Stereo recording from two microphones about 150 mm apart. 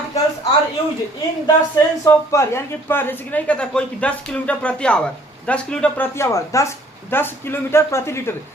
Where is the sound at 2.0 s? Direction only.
20° left (ahead or behind).